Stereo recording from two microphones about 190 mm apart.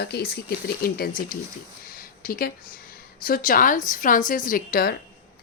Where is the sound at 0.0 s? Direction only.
55° left (ahead or behind).